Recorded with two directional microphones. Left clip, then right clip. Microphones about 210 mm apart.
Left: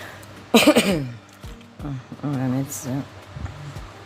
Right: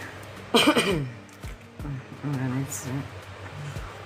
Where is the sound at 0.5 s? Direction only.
55° left (ahead or behind).